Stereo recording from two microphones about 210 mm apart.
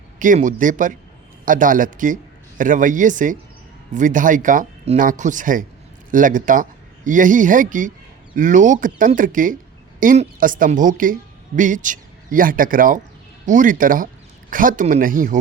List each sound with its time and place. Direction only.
0.2 s a man's voice: 40° right (ahead or behind)